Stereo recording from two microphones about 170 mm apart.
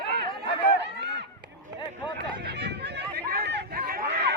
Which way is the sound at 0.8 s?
90° right.